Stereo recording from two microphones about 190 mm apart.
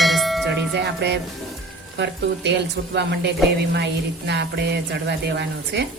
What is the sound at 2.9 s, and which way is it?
Speech, 60° right (ahead or behind).